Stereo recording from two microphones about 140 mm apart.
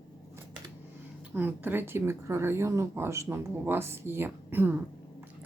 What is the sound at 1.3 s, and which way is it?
Speech, 15° right (ahead or behind).